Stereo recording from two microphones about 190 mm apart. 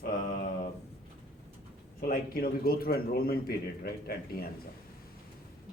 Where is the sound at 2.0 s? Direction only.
50° left (ahead or behind).